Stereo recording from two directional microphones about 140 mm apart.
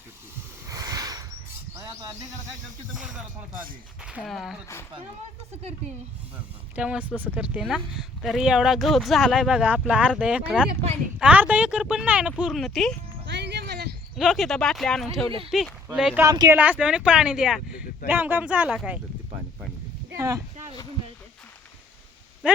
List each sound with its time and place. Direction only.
0.7 s a sound: 25° right (ahead or behind)
2.9 s speech: 5° right (ahead or behind)
6.7 s speech: 10° right (ahead or behind)
14.2 s speech: centre (ahead or behind)
16.1 s speech: 25° right (ahead or behind)
16.6 s speech: 10° right (ahead or behind)
20.1 s speech: 20° right (ahead or behind)